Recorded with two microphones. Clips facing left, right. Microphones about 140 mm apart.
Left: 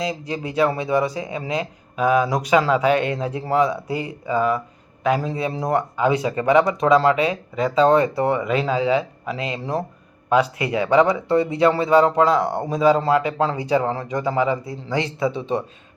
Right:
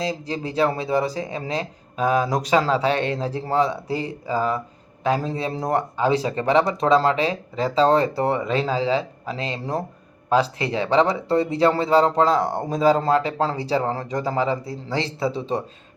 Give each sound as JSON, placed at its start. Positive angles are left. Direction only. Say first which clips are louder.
{"t": 0.0, "sound": "speech", "louder": "even", "side_deg": -30}